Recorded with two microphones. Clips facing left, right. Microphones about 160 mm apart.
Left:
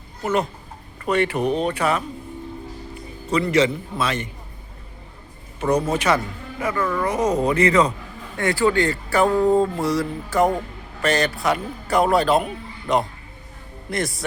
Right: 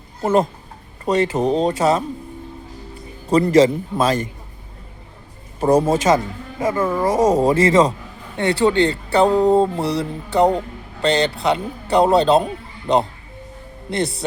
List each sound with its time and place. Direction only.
0.2 s speech: 30° right (ahead or behind)
3.3 s a man's voice: 40° right (ahead or behind)
5.5 s a man's voice: 35° right (ahead or behind)
6.1 s speech: 20° right (ahead or behind)
7.2 s speech: 45° right (ahead or behind)
7.5 s speech: 30° right (ahead or behind)
13.9 s speech: 30° right (ahead or behind)